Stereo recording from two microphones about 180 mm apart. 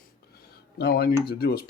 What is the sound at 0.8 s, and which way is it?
Speech, 60° left (ahead or behind).